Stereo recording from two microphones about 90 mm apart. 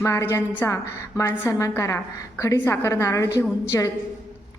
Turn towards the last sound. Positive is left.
turn(degrees=40)  # may be behind; listen again after turning